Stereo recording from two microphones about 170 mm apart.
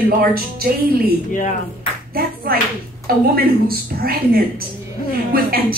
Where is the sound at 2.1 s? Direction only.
60° right (ahead or behind).